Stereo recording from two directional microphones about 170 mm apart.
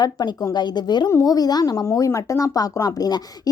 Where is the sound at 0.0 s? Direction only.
25° left (ahead or behind).